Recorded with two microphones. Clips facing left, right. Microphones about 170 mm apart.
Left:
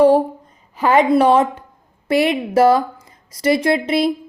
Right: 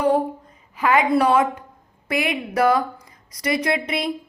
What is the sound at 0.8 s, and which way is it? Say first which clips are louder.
A woman's voice: left 4 dB; 30° left (ahead or behind).